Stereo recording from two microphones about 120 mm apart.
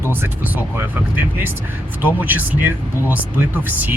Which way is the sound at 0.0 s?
15° right (ahead or behind).